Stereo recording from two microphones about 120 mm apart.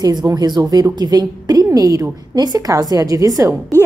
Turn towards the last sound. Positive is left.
turn(degrees=-30)  # may be behind; listen again after turning